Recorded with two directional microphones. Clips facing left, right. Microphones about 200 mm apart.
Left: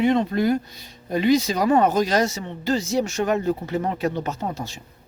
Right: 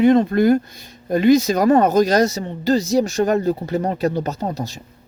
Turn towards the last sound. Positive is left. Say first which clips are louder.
# right 4 dB
turn(degrees=-40)  # may be behind; listen again after turning